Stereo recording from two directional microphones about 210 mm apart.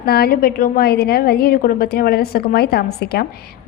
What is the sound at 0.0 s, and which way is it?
A woman's voice, 50° left (ahead or behind).